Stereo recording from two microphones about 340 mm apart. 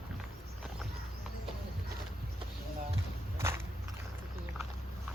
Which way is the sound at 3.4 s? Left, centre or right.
Centre.